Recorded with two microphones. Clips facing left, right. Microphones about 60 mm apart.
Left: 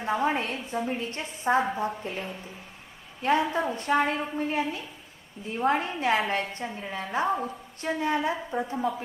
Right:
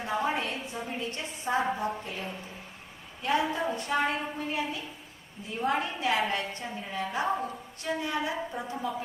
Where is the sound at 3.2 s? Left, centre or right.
Left.